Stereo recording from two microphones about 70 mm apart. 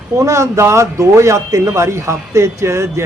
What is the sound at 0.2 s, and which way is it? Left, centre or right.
Speech, right.